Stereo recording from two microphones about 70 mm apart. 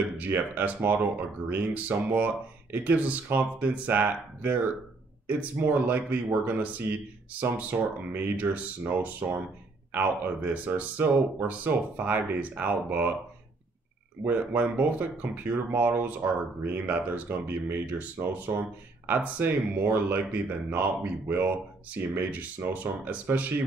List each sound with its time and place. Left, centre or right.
0.2 s speech: right
14.2 s speech: right